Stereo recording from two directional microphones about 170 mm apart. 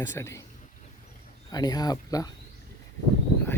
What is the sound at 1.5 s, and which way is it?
Speech, 25° left (ahead or behind).